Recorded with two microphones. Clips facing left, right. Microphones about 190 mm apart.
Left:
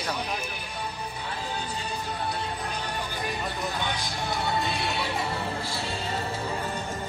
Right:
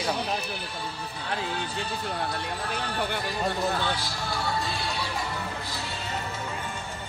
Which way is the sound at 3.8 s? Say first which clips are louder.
Right 1 dB; 20° left (ahead or behind).